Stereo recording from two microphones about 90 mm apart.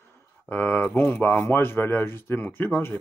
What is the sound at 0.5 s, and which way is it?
Speech, 20° left (ahead or behind).